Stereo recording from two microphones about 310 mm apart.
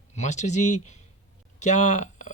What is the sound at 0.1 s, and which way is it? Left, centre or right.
Speech, left.